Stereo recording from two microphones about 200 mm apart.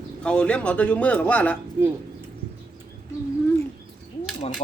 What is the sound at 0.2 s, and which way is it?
Speech, 5° left (ahead or behind).